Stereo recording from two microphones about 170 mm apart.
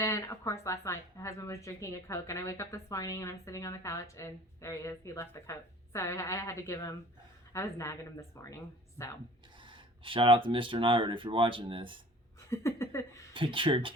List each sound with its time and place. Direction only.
0.0 s speech: 15° left (ahead or behind)
9.6 s speech: 30° right (ahead or behind)
12.5 s speech: 15° left (ahead or behind)
13.3 s speech: 30° right (ahead or behind)